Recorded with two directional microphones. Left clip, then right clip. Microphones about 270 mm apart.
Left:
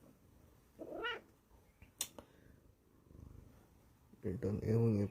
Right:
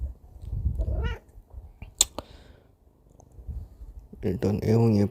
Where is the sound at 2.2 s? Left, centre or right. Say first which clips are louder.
Right 18 dB; right.